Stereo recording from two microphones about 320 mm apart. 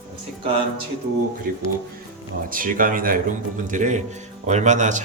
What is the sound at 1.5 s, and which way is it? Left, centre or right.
Speech, right.